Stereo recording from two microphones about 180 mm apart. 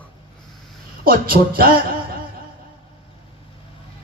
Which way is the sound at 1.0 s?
55° right (ahead or behind).